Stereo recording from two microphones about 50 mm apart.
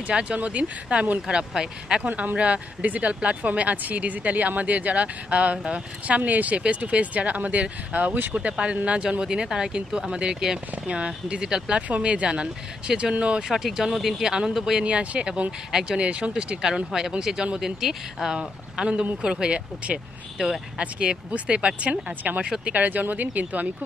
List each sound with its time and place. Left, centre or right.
0.0 s speech: right
1.2 s speech: centre
2.0 s speech: right
8.4 s speech: right
13.4 s speech: centre; by 23.7 s right